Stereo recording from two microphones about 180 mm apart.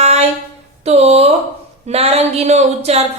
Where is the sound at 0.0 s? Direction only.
40° right (ahead or behind).